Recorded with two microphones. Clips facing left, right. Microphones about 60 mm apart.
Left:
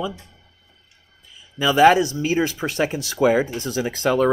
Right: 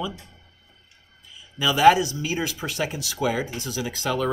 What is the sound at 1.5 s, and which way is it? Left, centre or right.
Speech, left.